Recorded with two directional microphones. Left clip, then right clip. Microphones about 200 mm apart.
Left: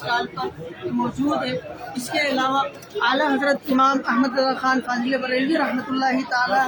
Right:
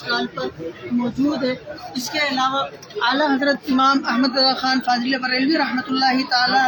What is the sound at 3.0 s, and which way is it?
A man's voice, centre (ahead or behind).